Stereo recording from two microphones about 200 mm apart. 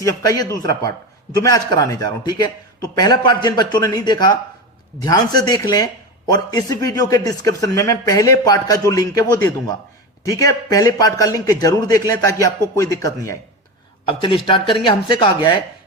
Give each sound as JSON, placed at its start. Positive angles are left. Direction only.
{"t": 0.0, "sound": "a man's voice", "side_deg": 15}
{"t": 14.0, "sound": "a man's voice", "side_deg": 25}